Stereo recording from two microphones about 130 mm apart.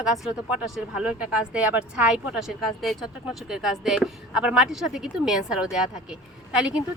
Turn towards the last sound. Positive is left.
turn(degrees=-5)  # may be behind; listen again after turning